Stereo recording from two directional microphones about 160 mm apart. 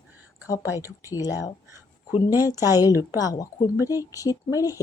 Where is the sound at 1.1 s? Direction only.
20° left (ahead or behind).